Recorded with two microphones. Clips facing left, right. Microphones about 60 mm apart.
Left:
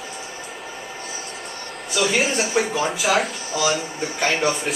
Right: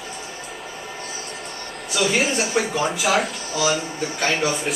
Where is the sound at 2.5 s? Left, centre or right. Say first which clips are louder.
Even; centre.